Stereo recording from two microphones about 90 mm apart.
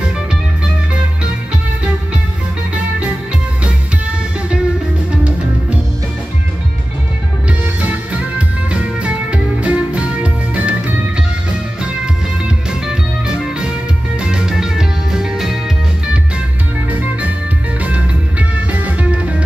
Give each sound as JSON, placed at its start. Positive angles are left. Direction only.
{"t": 5.1, "sound": "music", "side_deg": -15}
{"t": 7.8, "sound": "music", "side_deg": -15}
{"t": 12.8, "sound": "music", "side_deg": -10}
{"t": 17.8, "sound": "music", "side_deg": -15}